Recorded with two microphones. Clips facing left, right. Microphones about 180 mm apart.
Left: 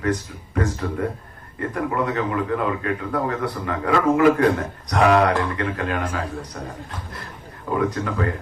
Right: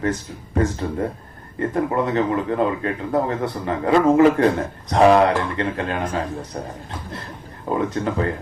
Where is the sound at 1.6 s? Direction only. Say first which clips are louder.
Right 3 dB; 30° right (ahead or behind).